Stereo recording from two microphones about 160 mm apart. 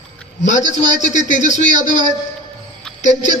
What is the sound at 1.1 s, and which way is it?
Speech, 50° left (ahead or behind).